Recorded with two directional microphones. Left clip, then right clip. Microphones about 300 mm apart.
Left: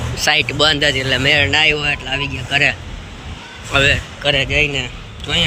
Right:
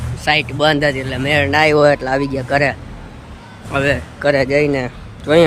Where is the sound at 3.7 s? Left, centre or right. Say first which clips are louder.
Left 3 dB; centre.